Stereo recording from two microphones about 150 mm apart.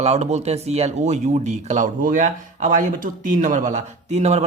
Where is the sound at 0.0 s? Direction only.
45° right (ahead or behind).